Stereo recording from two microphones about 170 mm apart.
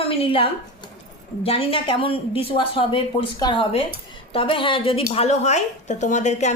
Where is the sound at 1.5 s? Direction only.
30° left (ahead or behind).